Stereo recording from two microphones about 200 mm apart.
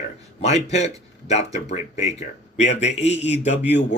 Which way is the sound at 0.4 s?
35° left (ahead or behind).